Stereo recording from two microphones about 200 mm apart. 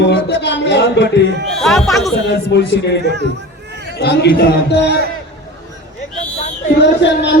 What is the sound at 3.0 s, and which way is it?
Speech, 60° right (ahead or behind).